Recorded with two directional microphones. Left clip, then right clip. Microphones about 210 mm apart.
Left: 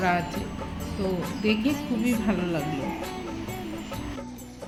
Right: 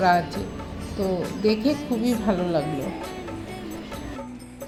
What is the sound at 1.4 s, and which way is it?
Speech, 15° right (ahead or behind).